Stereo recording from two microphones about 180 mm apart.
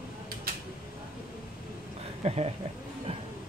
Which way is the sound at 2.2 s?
35° right (ahead or behind).